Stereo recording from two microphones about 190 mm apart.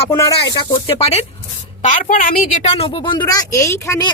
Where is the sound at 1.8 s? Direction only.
45° left (ahead or behind).